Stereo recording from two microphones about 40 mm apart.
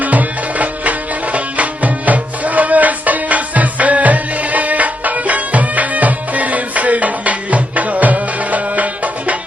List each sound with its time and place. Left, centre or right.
0.0 s music: right